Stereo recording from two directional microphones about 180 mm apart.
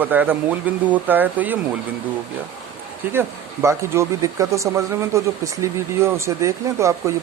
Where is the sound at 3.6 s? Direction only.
15° right (ahead or behind).